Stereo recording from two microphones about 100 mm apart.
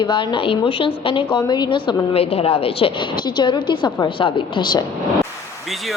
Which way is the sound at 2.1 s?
75° left (ahead or behind).